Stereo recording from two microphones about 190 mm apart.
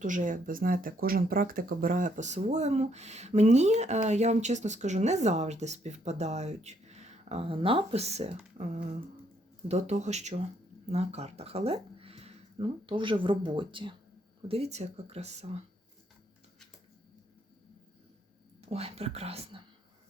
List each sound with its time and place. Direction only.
0.0 s speech: 45° right (ahead or behind)
18.6 s speech: 30° right (ahead or behind)